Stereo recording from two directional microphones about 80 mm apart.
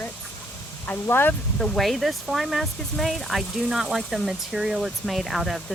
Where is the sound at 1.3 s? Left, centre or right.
Centre.